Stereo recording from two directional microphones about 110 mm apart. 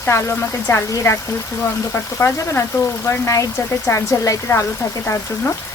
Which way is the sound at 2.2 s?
25° left (ahead or behind).